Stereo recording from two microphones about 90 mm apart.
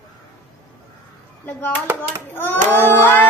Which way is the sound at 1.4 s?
20° left (ahead or behind).